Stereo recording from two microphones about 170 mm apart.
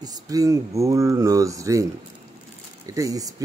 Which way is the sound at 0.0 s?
20° right (ahead or behind).